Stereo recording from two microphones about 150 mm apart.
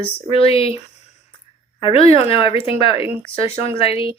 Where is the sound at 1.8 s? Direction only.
40° left (ahead or behind).